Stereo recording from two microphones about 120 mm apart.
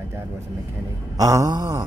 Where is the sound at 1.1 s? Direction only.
30° right (ahead or behind).